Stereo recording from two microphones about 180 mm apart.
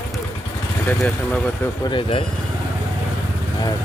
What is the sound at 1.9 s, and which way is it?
Speech, 30° left (ahead or behind).